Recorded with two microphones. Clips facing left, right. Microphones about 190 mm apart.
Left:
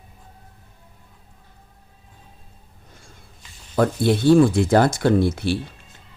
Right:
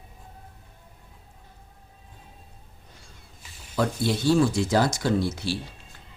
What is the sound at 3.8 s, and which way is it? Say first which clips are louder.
Speech: left 6 dB; 55° left (ahead or behind).